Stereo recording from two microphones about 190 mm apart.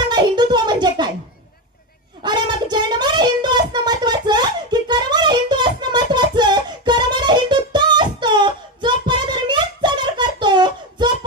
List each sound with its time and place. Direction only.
0.1 s music: 25° right (ahead or behind)
2.2 s music: 25° right (ahead or behind)